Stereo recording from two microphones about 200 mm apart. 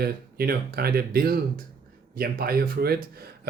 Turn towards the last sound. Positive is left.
turn(degrees=-50)  # may be behind; listen again after turning